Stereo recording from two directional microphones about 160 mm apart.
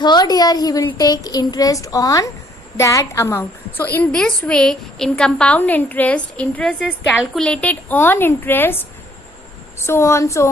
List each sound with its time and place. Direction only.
0.0 s a woman's voice: 25° left (ahead or behind)